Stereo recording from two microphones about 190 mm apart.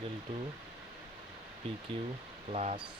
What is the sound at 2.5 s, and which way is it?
Speech, 35° right (ahead or behind).